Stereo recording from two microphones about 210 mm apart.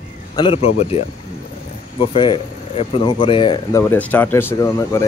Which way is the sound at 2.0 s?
25° left (ahead or behind).